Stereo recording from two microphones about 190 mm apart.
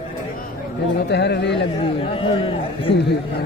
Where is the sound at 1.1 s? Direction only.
60° left (ahead or behind).